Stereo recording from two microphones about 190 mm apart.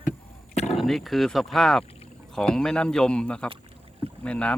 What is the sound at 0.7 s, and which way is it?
Speech, centre (ahead or behind).